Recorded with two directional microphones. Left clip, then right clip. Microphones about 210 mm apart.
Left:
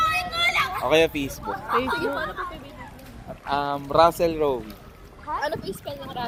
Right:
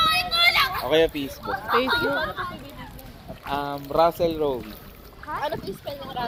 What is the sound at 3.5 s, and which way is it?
Speech, 10° left (ahead or behind).